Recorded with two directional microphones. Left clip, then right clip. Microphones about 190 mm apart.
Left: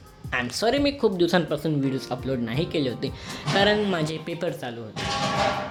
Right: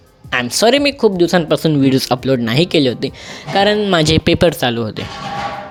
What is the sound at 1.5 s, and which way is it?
Speech, 50° right (ahead or behind).